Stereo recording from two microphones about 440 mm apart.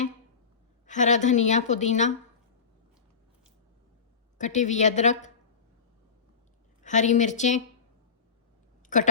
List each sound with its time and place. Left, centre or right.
0.9 s a woman's voice: centre
4.4 s a woman's voice: centre
6.8 s a woman's voice: centre
8.9 s a woman's voice: centre